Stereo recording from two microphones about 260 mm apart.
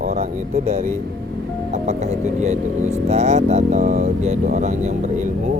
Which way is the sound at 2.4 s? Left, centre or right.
Right.